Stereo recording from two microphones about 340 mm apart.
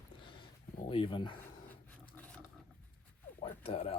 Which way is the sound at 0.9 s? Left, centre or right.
Centre.